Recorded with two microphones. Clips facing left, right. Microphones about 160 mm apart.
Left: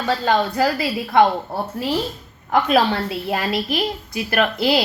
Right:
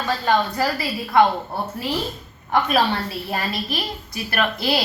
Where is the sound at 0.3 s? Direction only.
90° left.